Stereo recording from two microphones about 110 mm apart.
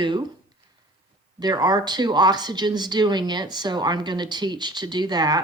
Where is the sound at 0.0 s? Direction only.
45° right (ahead or behind).